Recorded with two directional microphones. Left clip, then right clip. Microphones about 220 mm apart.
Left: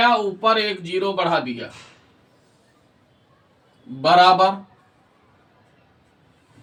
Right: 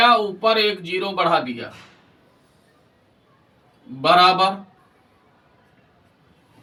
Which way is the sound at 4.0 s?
5° left (ahead or behind).